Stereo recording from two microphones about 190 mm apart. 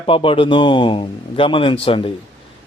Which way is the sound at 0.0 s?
25° left (ahead or behind).